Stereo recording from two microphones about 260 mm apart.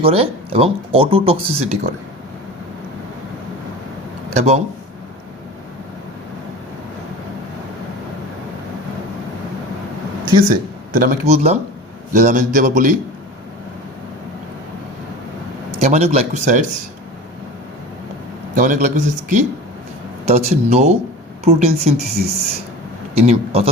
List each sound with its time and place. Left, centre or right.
0.0 s speech: right
4.3 s speech: right
10.5 s speech: right
15.8 s speech: right
18.5 s speech: right
22.0 s speech: right
23.1 s speech: right